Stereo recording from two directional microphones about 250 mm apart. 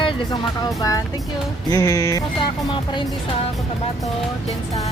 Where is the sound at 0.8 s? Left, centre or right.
Centre.